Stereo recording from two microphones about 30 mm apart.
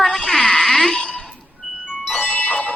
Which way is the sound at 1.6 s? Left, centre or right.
Right.